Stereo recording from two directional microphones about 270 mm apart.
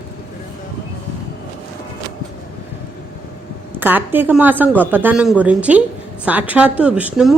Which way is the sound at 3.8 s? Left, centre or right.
Centre.